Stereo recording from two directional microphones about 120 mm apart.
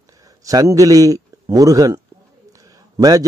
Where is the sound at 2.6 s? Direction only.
30° right (ahead or behind).